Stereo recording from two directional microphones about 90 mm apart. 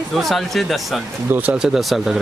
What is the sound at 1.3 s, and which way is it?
Speech, 15° right (ahead or behind).